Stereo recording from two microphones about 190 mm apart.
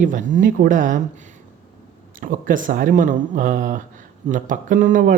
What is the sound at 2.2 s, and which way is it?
Speech, 45° right (ahead or behind).